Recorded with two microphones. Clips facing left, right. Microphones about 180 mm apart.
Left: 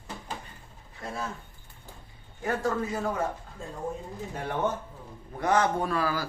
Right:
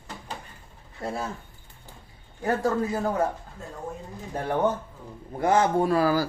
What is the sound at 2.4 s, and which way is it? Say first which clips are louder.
Speech: right 4 dB; 35° right (ahead or behind).